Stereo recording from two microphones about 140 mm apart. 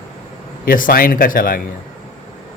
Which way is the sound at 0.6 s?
85° left.